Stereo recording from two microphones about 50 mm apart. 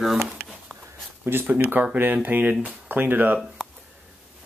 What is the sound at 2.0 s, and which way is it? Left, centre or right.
Speech, right.